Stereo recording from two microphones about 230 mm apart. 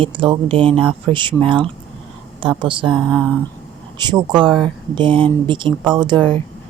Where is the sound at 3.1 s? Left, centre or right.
Centre.